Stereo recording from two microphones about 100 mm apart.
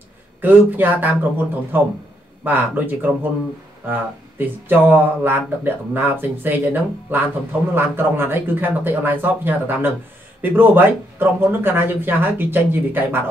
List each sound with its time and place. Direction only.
0.4 s a man's voice: 20° right (ahead or behind)